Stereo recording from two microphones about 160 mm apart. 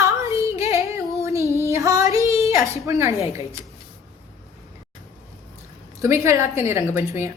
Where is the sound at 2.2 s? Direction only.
20° right (ahead or behind).